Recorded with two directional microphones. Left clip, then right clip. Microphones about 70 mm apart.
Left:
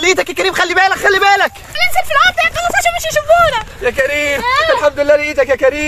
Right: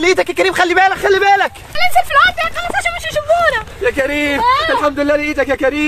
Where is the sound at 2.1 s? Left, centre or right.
Right.